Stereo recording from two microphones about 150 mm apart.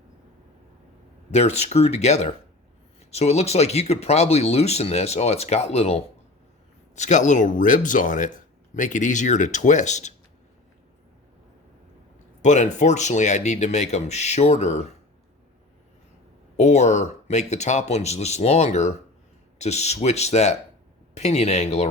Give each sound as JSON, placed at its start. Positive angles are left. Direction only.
{"t": 1.3, "sound": "speech", "side_deg": 45}
{"t": 12.4, "sound": "speech", "side_deg": 55}
{"t": 16.6, "sound": "speech", "side_deg": 50}